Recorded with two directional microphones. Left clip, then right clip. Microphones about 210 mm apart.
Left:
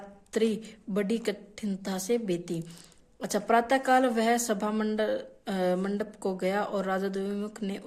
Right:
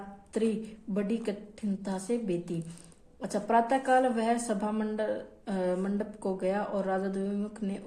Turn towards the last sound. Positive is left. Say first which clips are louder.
# left 1 dB
turn(degrees=40)  # may be behind; listen again after turning